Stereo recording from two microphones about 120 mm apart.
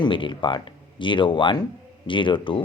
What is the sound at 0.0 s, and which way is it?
A man's voice, 45° left (ahead or behind).